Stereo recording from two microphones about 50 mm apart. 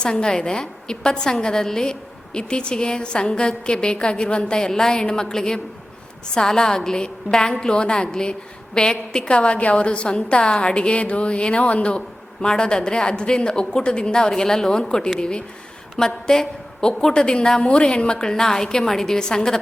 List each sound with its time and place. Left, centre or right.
0.0 s a woman's voice: centre